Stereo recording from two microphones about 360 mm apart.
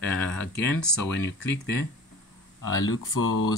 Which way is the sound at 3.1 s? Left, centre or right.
Left.